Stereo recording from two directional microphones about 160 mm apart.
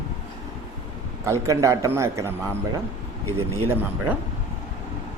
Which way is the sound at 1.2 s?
20° right (ahead or behind).